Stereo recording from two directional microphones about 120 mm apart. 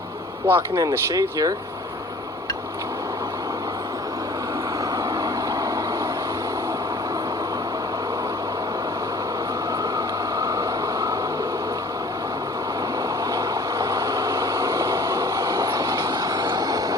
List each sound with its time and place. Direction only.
0.4 s speech: 25° right (ahead or behind)
5.2 s vehicle: 30° right (ahead or behind)
10.3 s train: 25° right (ahead or behind)
13.3 s vehicle: 25° right (ahead or behind)